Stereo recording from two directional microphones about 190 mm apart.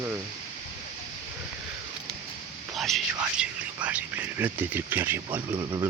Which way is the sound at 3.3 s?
5° right (ahead or behind).